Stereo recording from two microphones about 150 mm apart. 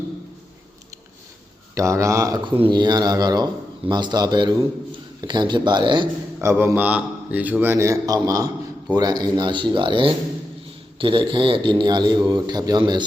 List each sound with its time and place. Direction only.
1.7 s speech: 20° right (ahead or behind)
2.4 s a man's voice: 30° right (ahead or behind)
6.4 s a man's voice: 20° right (ahead or behind)